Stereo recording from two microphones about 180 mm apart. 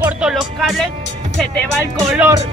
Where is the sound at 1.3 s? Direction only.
5° left (ahead or behind).